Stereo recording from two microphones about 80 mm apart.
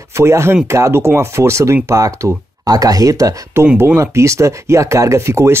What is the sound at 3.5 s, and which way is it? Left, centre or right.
Speech, right.